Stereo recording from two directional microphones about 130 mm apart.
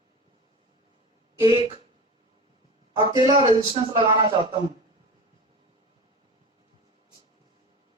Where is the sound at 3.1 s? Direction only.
35° right (ahead or behind).